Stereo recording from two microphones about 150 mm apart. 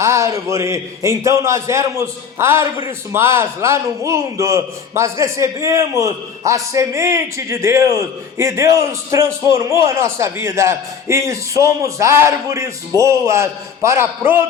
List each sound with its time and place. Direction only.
0.0 s a man's voice: 20° right (ahead or behind)